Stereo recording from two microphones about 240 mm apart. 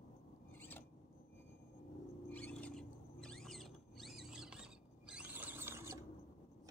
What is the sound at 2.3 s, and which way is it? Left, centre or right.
Rodents, centre.